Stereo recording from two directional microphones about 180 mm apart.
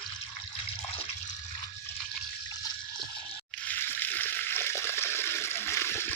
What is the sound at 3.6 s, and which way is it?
Water, 10° left (ahead or behind).